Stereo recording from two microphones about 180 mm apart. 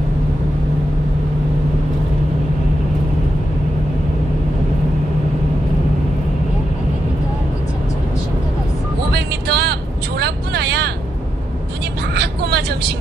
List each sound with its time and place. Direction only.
9.1 s vehicle: 65° right (ahead or behind)
12.1 s vehicle: 65° right (ahead or behind)